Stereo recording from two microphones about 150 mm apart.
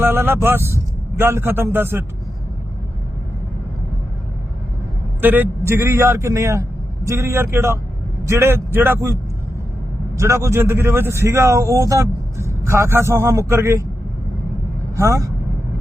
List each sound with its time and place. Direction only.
0.0 s a man's voice: 15° right (ahead or behind)
5.2 s a man's voice: 10° right (ahead or behind)
10.2 s a man's voice: 20° right (ahead or behind)
14.9 s speech: 20° right (ahead or behind)